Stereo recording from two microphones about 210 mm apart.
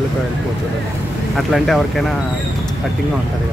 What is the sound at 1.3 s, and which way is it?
Speech, centre (ahead or behind).